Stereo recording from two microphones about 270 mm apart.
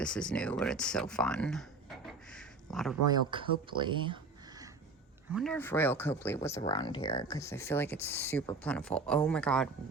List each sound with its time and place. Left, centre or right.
0.0 s speech: centre
2.0 s a sound: centre
2.7 s speech: centre
3.1 s speech: centre
5.3 s speech: centre